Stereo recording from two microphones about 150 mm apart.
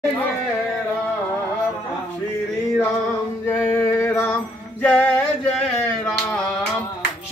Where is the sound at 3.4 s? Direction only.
20° left (ahead or behind).